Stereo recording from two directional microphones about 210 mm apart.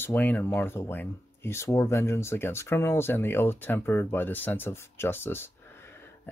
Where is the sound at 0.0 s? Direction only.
10° left (ahead or behind).